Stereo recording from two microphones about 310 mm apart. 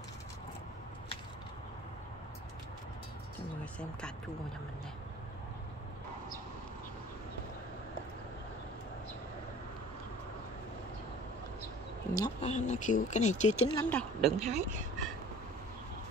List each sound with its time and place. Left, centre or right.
12.1 s speech: centre
13.8 s a woman's voice: centre
14.5 s speech: right